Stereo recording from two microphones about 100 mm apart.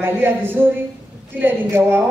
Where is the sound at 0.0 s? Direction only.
20° right (ahead or behind).